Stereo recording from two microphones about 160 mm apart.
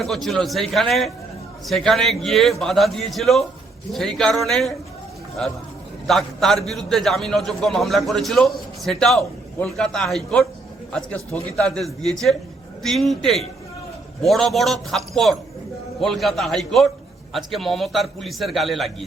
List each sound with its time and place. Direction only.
0.0 s a man's voice: centre (ahead or behind)
6.1 s a man's voice: centre (ahead or behind)